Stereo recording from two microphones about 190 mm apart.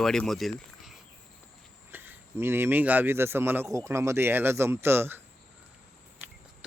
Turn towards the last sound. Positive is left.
turn(degrees=-10)  # may be behind; listen again after turning